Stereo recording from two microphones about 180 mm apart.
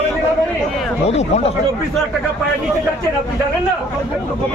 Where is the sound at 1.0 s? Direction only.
35° left (ahead or behind).